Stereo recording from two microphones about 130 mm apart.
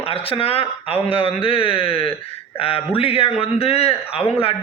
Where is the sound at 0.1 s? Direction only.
45° left (ahead or behind).